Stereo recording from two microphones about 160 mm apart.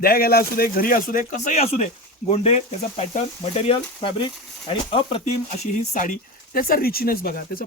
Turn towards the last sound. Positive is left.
turn(degrees=65)  # may be behind; listen again after turning